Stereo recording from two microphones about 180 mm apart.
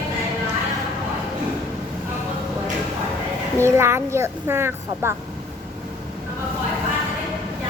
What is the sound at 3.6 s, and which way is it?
Speech, 15° right (ahead or behind).